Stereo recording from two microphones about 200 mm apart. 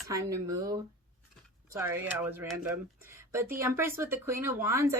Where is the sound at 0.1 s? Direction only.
15° right (ahead or behind).